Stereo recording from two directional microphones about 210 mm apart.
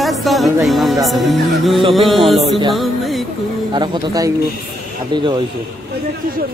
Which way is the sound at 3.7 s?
20° right (ahead or behind).